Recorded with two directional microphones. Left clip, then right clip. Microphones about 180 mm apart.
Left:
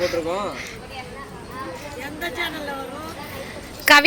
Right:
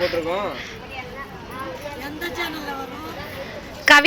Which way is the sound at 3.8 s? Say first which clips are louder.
Right 1 dB; centre (ahead or behind).